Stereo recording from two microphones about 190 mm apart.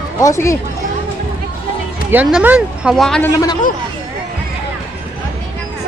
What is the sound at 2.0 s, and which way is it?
Speech, 10° right (ahead or behind).